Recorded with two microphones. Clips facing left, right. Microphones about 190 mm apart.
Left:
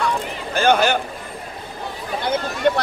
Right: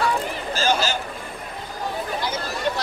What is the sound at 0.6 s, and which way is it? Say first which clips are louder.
Speech: left 7 dB; 60° left (ahead or behind).